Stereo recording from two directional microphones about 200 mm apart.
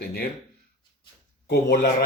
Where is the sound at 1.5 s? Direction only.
50° left (ahead or behind).